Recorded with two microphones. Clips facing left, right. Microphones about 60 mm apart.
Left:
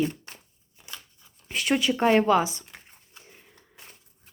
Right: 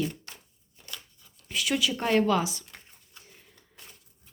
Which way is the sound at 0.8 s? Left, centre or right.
Centre.